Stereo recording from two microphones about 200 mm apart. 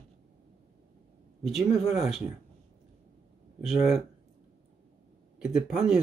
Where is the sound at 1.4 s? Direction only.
Centre (ahead or behind).